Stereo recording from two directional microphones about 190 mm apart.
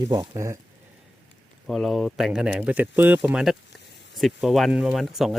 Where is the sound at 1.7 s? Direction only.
Centre (ahead or behind).